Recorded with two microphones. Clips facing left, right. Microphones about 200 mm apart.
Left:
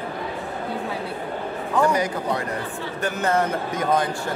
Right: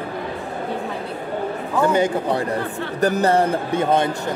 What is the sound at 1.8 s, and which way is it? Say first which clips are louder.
A man's voice: right 5 dB; 25° right (ahead or behind).